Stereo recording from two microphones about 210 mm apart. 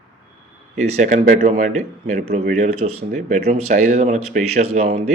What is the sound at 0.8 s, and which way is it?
Speech, 35° right (ahead or behind).